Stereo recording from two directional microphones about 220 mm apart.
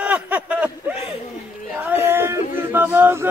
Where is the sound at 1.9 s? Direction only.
10° right (ahead or behind).